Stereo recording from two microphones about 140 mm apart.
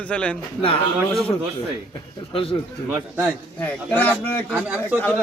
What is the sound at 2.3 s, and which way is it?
Speech, 40° left (ahead or behind).